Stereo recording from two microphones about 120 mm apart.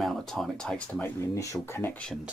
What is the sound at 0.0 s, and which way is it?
Speech, 5° left (ahead or behind).